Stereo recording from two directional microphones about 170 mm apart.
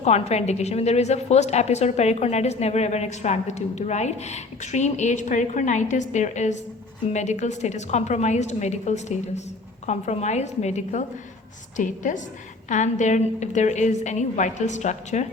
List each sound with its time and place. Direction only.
0.0 s a woman's voice: 40° left (ahead or behind)